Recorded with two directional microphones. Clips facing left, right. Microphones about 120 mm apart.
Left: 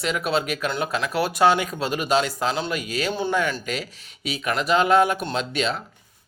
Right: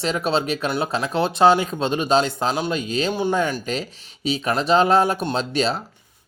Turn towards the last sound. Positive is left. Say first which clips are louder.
# right 3 dB
turn(degrees=-35)  # may be behind; listen again after turning